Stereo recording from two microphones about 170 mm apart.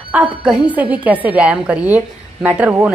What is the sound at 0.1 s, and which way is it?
A woman's voice, 5° right (ahead or behind).